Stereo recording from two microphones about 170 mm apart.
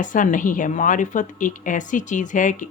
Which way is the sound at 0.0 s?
50° left (ahead or behind).